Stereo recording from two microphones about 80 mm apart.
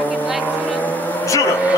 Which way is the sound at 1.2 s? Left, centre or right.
Left.